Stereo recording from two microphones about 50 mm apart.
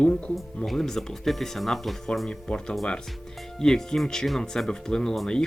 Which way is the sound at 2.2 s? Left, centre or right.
Centre.